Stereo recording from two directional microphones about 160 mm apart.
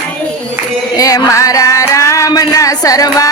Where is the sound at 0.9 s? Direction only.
20° left (ahead or behind).